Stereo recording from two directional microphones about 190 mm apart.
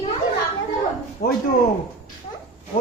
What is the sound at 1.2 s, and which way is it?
Speech, 55° left (ahead or behind).